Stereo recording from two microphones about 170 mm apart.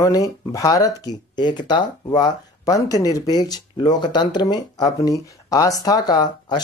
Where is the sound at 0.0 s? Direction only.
20° left (ahead or behind).